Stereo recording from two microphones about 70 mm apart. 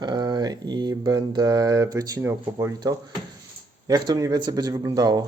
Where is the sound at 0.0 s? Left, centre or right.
Right.